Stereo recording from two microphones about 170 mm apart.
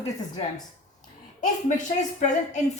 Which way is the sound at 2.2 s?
45° left (ahead or behind).